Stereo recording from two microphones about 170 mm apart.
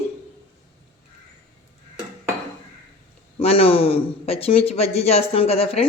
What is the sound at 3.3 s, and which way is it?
Speech, 35° left (ahead or behind).